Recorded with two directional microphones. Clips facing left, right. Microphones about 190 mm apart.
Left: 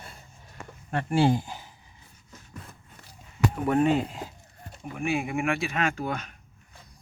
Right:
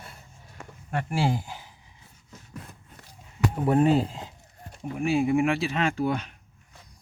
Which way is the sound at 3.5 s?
30° right (ahead or behind).